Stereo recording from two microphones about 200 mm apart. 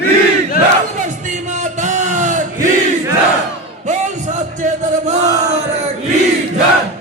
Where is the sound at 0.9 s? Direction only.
40° right (ahead or behind).